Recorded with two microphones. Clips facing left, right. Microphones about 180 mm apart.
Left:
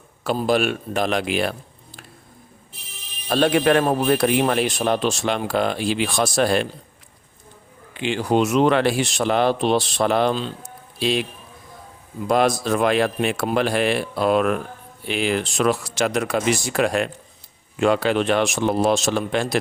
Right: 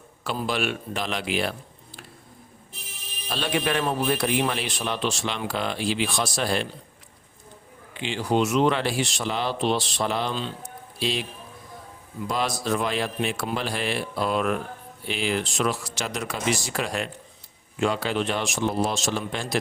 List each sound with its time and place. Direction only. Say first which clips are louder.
0.3 s a man's voice: left 7 dB; 45° left (ahead or behind)
3.2 s a man's voice: left 9 dB; 50° left (ahead or behind)
8.0 s a man's voice: left 4 dB; 55° left (ahead or behind)
12.3 s a man's voice: left 7 dB; 55° left (ahead or behind)